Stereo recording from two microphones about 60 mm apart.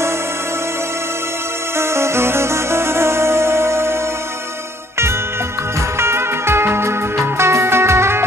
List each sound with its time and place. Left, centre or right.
1.8 s music: right
5.9 s music: right